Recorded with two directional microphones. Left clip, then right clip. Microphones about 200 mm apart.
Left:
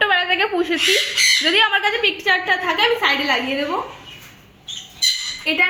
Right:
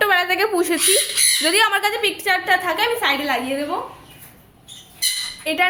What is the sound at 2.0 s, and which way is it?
A woman's voice, 30° right (ahead or behind).